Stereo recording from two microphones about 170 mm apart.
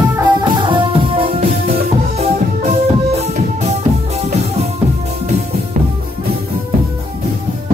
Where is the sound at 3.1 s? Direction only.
40° right (ahead or behind).